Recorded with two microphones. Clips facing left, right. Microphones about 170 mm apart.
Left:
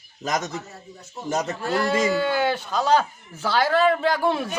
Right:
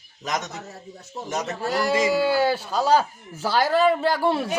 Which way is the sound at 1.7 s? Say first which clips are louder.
Right 1 dB; 5° right (ahead or behind).